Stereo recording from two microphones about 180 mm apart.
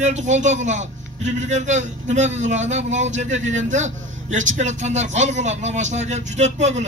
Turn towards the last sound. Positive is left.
turn(degrees=-40)  # may be behind; listen again after turning